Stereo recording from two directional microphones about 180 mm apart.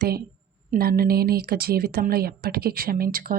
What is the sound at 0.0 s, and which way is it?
Speech, 60° right (ahead or behind).